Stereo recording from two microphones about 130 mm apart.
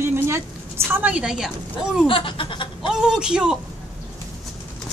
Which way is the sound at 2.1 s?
40° left (ahead or behind).